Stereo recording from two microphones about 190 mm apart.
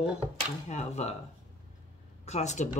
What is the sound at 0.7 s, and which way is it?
Speech, 35° left (ahead or behind).